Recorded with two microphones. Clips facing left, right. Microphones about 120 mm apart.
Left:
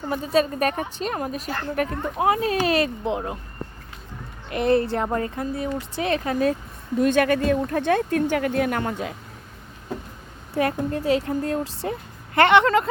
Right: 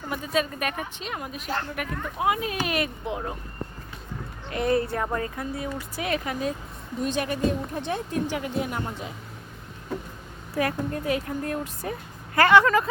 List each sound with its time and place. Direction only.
0.1 s a woman's voice: 35° left (ahead or behind)
4.6 s speech: 20° right (ahead or behind)
4.9 s a woman's voice: 25° left (ahead or behind)
7.0 s speech: 60° left (ahead or behind)
10.5 s speech: 25° left (ahead or behind)